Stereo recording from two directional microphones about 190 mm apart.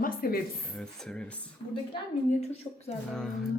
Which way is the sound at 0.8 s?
5° left (ahead or behind).